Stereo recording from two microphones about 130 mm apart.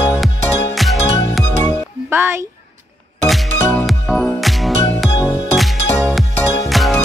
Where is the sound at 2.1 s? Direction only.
20° right (ahead or behind).